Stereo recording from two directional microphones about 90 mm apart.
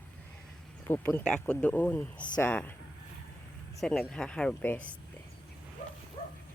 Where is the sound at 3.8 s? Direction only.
5° left (ahead or behind).